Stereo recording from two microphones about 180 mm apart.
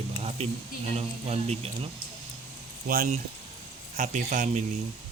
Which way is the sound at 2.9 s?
50° right (ahead or behind).